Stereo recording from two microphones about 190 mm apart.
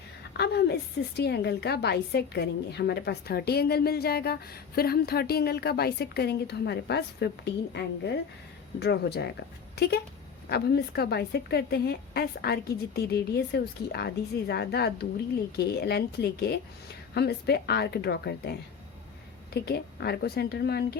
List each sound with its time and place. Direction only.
0.3 s a woman's voice: 55° left (ahead or behind)
19.5 s a woman's voice: 60° left (ahead or behind)